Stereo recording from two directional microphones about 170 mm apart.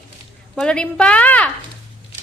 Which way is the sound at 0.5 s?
5° left (ahead or behind).